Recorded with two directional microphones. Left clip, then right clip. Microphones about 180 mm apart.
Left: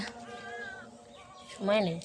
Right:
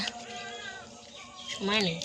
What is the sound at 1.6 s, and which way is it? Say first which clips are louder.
Speech: left 1 dB; 55° left (ahead or behind).